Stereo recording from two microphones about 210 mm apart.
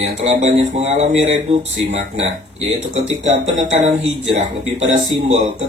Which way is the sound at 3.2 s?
35° right (ahead or behind).